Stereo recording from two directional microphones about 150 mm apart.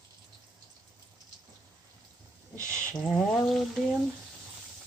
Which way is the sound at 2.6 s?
20° right (ahead or behind).